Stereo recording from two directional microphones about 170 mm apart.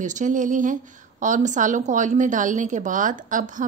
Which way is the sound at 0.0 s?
45° right (ahead or behind).